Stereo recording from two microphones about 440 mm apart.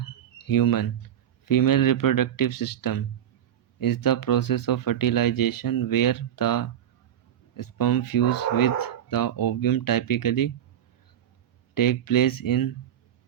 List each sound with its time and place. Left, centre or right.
0.0 s a sound: left
1.5 s speech: left
11.7 s speech: left